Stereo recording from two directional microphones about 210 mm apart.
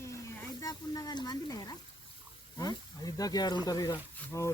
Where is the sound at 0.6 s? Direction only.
15° left (ahead or behind).